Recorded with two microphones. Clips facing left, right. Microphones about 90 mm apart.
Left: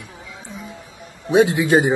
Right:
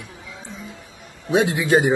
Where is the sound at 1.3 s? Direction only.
20° left (ahead or behind).